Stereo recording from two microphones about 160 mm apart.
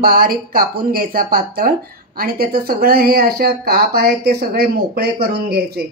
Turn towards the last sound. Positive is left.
turn(degrees=-85)